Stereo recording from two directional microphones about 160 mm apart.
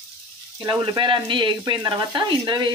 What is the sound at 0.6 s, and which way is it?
Frying, 25° right (ahead or behind).